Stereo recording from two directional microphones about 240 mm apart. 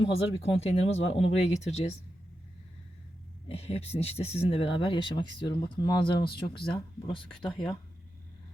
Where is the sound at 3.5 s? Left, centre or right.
Left.